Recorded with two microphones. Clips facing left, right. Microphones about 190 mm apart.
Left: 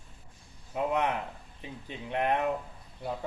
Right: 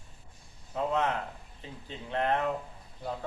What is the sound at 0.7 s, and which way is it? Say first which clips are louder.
Speech: even; 15° left (ahead or behind).